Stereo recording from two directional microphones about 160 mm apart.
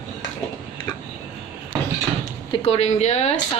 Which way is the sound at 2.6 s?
40° left (ahead or behind).